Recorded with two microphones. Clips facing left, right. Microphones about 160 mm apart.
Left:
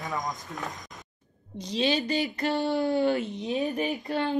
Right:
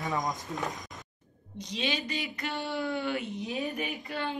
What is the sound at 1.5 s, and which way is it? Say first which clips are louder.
Speech: left 7 dB; 35° left (ahead or behind).